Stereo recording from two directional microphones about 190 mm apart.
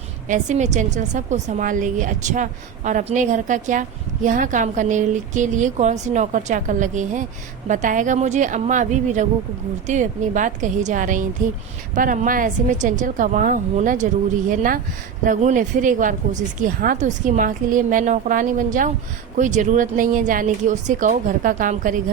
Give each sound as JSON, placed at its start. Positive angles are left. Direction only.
{"t": 0.3, "sound": "a woman's voice", "side_deg": -40}